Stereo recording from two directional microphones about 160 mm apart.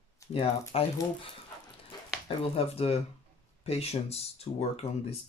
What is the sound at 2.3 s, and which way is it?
Speech, 40° left (ahead or behind).